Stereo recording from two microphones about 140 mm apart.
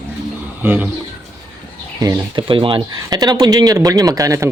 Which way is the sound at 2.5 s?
40° right (ahead or behind).